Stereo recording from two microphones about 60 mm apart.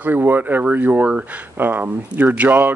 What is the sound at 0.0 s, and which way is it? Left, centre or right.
Speech, right.